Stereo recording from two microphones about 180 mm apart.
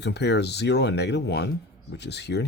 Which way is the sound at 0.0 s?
70° left (ahead or behind).